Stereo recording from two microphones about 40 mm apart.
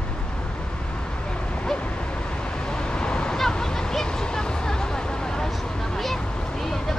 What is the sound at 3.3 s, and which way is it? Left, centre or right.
Hubbub, centre.